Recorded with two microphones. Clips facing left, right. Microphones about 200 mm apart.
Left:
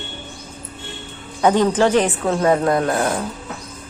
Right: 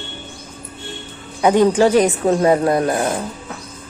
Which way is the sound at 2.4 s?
25° right (ahead or behind).